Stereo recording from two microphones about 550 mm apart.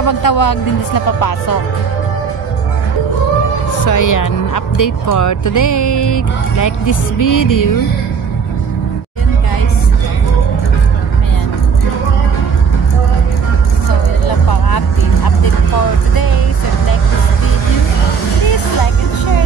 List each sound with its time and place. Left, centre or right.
0.0 s speech: left
3.8 s speech: left
14.2 s vehicle: left